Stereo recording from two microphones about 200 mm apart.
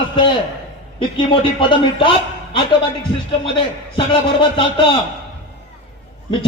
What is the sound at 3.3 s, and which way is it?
Speech, 25° left (ahead or behind).